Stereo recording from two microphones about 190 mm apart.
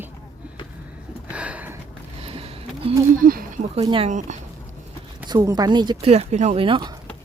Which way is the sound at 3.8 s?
30° right (ahead or behind).